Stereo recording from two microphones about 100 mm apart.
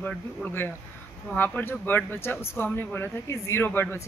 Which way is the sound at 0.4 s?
20° left (ahead or behind).